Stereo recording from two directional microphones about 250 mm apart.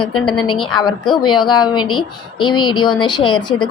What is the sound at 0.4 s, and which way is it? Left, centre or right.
A woman's voice, centre.